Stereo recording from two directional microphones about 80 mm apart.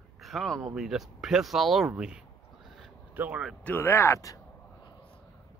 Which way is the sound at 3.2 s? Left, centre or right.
Centre.